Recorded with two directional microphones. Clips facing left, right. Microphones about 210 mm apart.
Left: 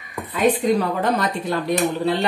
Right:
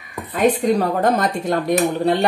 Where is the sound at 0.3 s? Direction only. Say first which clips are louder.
Right 1 dB; 45° right (ahead or behind).